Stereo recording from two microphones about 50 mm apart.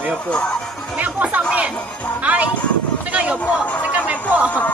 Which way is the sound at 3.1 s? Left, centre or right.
Right.